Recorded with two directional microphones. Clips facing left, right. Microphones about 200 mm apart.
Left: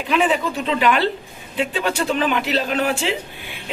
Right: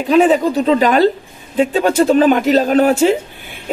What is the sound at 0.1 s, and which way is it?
A woman's voice, 40° right (ahead or behind).